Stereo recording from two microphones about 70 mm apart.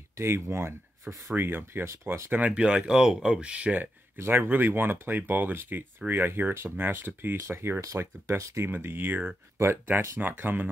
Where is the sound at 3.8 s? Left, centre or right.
Right.